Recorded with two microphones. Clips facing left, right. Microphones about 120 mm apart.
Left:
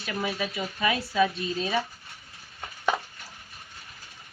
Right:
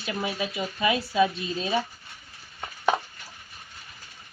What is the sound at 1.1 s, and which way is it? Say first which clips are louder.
Speech: right 1 dB; 25° right (ahead or behind).